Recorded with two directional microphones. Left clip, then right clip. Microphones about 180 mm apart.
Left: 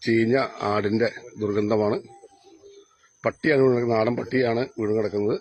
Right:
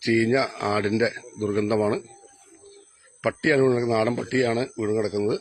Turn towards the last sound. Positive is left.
turn(degrees=-5)  # may be behind; listen again after turning